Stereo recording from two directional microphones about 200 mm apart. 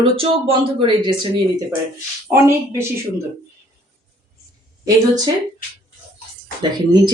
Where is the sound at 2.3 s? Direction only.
15° right (ahead or behind).